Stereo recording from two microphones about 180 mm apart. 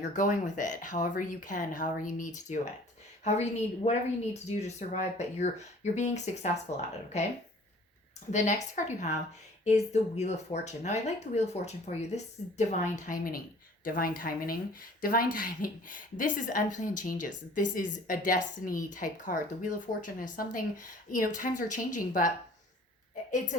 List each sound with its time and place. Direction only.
0.0 s speech: 45° left (ahead or behind)
8.3 s speech: 40° left (ahead or behind)